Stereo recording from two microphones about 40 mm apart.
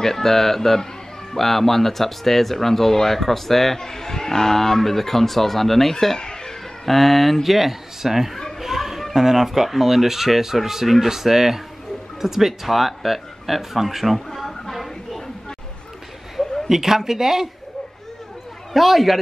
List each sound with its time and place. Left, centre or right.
0.0 s speech: centre
6.1 s a sound: centre
6.9 s speech: centre
8.5 s children playing: centre
9.1 s speech: centre
16.6 s speech: centre
18.7 s a man's voice: centre